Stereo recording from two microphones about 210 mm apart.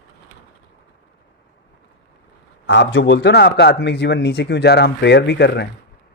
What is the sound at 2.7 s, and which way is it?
Speech, 55° left (ahead or behind).